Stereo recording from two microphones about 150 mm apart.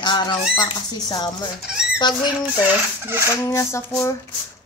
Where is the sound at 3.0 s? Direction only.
15° right (ahead or behind).